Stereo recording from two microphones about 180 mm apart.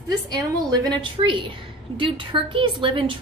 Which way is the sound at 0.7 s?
25° right (ahead or behind).